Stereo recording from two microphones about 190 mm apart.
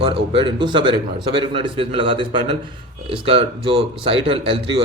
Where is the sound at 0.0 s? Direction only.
25° right (ahead or behind).